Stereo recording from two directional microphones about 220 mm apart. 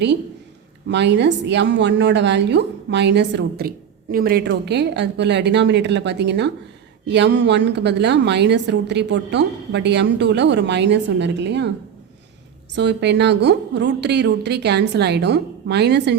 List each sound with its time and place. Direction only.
0.9 s a woman's voice: 50° right (ahead or behind)
12.7 s a woman's voice: 50° right (ahead or behind)